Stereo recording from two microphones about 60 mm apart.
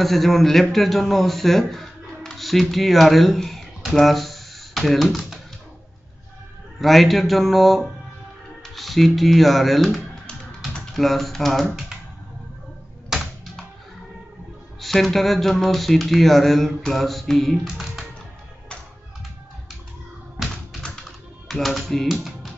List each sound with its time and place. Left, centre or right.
0.0 s speech: centre
6.8 s speech: centre
13.1 s typewriter: centre
14.8 s speech: centre
20.4 s tap: centre
21.5 s speech: centre
22.0 s music: centre